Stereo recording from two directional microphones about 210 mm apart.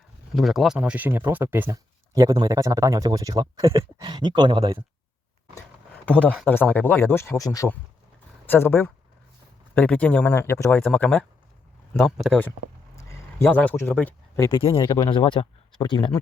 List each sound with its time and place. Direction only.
0.3 s speech: centre (ahead or behind); by 4.8 s 20° right (ahead or behind)
6.1 s speech: 5° left (ahead or behind)
14.6 s speech: 25° left (ahead or behind)